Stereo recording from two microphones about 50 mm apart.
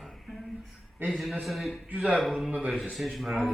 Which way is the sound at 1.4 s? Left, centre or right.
Centre.